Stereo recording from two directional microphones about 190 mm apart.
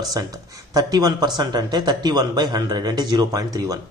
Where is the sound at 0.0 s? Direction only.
20° right (ahead or behind).